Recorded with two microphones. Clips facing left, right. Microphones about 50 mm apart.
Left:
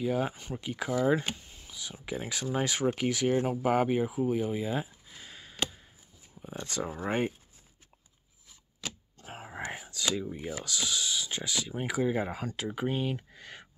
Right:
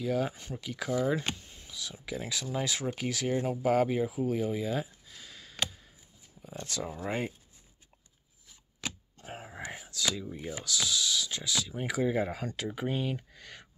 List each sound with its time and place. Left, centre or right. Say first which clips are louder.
0.0 s speech: left 1 dB; centre
1.3 s a sound: left 1 dB; centre
2.0 s speech: left 2 dB; left
3.4 s speech: even; left
5.2 s a sound: left 1 dB; left
6.4 s speech: left 2 dB; left
6.9 s speech: left 4 dB; left
9.2 s whispering: right 1 dB; centre
9.5 s whispering: left 3 dB; left
10.2 s speech: left 2 dB; centre
10.6 s speech: right 3 dB; left
11.8 s speech: even; centre